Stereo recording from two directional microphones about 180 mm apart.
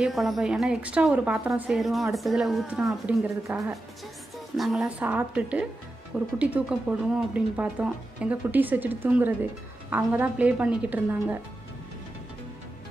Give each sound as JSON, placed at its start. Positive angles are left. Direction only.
{"t": 0.0, "sound": "a woman's voice", "side_deg": 0}